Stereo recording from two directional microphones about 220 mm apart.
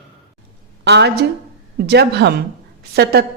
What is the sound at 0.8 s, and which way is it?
Speech, 50° right (ahead or behind).